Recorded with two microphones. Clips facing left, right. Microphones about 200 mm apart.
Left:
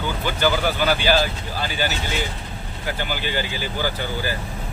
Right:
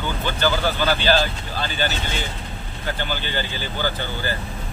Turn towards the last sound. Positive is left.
turn(degrees=10)  # may be behind; listen again after turning